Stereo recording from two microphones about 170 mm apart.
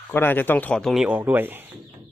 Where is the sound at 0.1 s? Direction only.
10° left (ahead or behind); by 1.7 s 10° right (ahead or behind).